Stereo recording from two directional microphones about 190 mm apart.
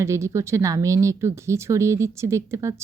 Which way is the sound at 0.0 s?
15° right (ahead or behind).